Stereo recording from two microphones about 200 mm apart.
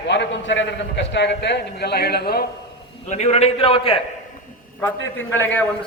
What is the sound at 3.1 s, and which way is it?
Speech, 35° left (ahead or behind).